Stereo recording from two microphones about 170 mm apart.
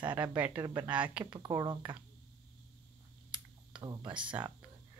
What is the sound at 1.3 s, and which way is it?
Speech, 25° right (ahead or behind).